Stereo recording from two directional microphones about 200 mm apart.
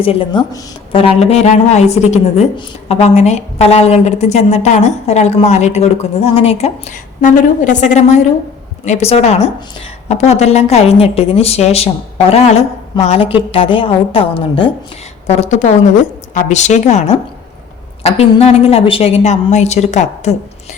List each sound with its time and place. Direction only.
0.0 s a woman's voice: 25° left (ahead or behind)